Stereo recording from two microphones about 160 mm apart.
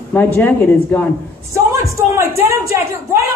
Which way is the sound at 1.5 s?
20° right (ahead or behind).